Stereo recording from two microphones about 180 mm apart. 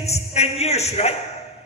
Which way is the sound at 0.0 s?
35° left (ahead or behind).